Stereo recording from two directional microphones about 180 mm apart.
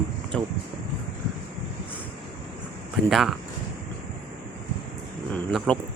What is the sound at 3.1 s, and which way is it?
Speech, centre (ahead or behind).